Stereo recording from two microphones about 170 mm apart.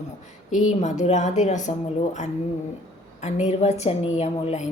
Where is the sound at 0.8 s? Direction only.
45° left (ahead or behind).